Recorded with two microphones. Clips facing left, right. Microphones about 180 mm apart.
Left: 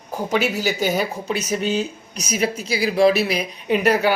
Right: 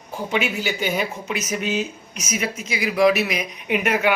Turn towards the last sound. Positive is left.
turn(degrees=35)  # may be behind; listen again after turning